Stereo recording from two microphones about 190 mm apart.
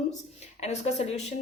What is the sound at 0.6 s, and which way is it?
Speech, 35° left (ahead or behind).